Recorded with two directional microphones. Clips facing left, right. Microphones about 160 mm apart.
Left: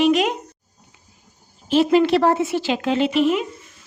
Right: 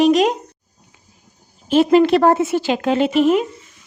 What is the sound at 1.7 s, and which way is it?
Speech, 50° right (ahead or behind).